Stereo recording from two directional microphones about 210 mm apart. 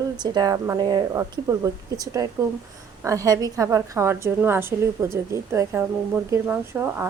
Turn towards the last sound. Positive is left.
turn(degrees=-10)  # may be behind; listen again after turning